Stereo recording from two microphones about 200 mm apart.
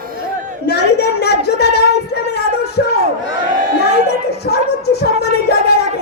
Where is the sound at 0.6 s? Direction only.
55° left (ahead or behind).